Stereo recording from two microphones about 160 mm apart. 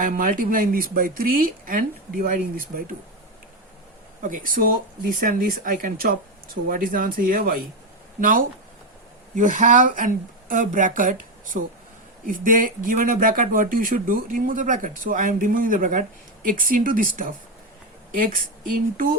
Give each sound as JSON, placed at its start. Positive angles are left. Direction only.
{"t": 0.0, "sound": "speech", "side_deg": -60}
{"t": 4.2, "sound": "a woman's voice", "side_deg": -60}